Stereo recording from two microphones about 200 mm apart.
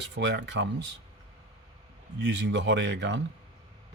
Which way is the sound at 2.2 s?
65° right (ahead or behind).